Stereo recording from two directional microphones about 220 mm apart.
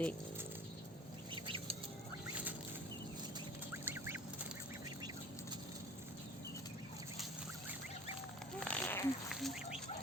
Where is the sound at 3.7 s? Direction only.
10° right (ahead or behind).